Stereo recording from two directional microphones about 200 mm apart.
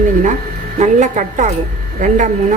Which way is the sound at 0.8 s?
35° right (ahead or behind).